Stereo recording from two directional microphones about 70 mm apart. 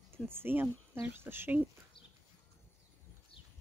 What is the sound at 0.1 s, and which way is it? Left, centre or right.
Speech, right.